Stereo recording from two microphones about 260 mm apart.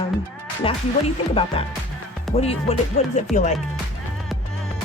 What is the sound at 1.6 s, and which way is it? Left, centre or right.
Speech, left.